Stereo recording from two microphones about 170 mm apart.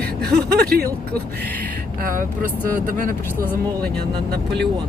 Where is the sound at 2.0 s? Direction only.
55° right (ahead or behind).